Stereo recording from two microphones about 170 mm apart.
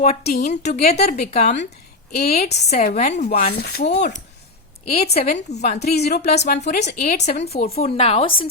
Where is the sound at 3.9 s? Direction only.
80° left.